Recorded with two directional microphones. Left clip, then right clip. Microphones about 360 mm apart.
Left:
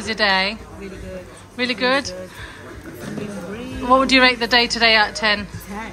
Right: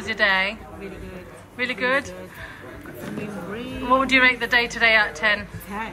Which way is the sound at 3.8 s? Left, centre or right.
Centre.